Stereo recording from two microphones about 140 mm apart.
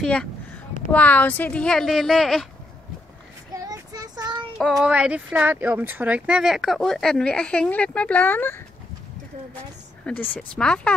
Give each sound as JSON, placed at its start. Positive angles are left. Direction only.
{"t": 0.0, "sound": "speech", "side_deg": 5}
{"t": 3.5, "sound": "child singing", "side_deg": -25}
{"t": 4.8, "sound": "speech", "side_deg": -10}
{"t": 10.1, "sound": "speech", "side_deg": 5}